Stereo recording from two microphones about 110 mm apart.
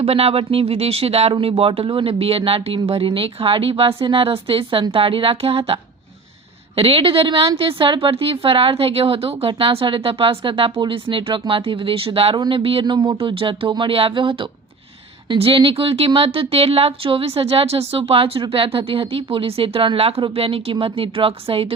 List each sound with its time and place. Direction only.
0.0 s a woman's voice: 65° right (ahead or behind)
12.8 s a woman's voice: 40° right (ahead or behind); by 21.7 s 60° right (ahead or behind)